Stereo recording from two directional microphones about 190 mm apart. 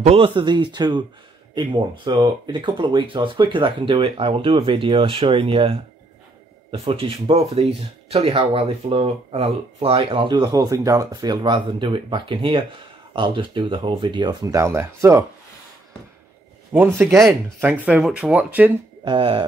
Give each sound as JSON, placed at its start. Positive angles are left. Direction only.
{"t": 0.0, "sound": "speech", "side_deg": -30}
{"t": 16.7, "sound": "speech", "side_deg": -15}
{"t": 19.0, "sound": "speech", "side_deg": -25}